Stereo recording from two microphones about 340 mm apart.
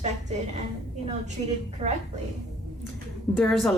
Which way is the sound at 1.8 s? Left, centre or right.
Centre.